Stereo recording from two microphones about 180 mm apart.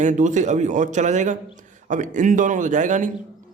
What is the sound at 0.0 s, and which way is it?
Speech, 45° right (ahead or behind).